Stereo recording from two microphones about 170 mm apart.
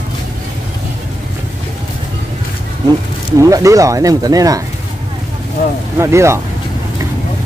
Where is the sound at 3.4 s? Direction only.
20° right (ahead or behind).